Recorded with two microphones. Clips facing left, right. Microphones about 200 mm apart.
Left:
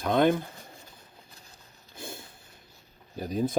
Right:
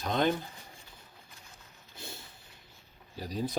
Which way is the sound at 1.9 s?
50° left (ahead or behind).